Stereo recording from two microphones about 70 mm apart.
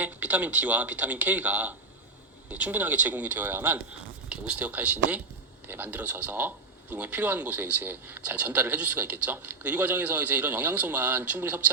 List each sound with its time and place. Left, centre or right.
0.0 s speech: right
4.3 s speech: centre